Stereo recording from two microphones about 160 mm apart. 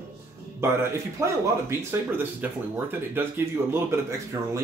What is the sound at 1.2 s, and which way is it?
Speech, 15° right (ahead or behind).